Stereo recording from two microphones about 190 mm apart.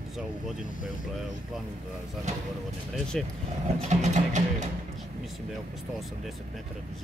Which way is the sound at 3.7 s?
35° right (ahead or behind).